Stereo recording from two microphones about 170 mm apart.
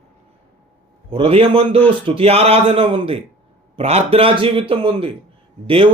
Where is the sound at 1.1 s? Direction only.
35° right (ahead or behind).